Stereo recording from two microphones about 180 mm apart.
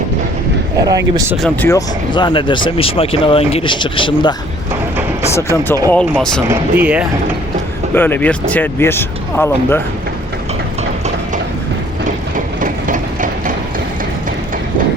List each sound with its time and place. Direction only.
0.8 s speech: 20° right (ahead or behind)
1.4 s speech: 5° left (ahead or behind)
1.7 s speech: 25° left (ahead or behind)
5.9 s speech: 5° left (ahead or behind)
6.5 s speech: 10° right (ahead or behind)
7.9 s speech: 10° left (ahead or behind)
12.5 s a sound: 45° right (ahead or behind)